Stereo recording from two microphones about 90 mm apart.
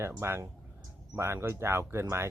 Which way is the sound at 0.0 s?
30° right (ahead or behind).